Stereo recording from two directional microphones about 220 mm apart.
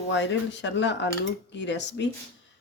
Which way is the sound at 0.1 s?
55° left (ahead or behind).